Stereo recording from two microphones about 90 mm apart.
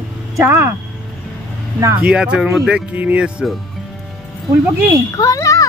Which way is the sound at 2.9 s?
15° right (ahead or behind).